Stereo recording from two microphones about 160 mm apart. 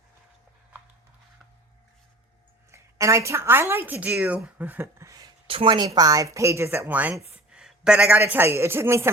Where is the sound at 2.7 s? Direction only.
20° right (ahead or behind).